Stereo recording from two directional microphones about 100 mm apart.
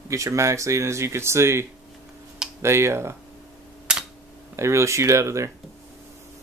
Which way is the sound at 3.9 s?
10° right (ahead or behind).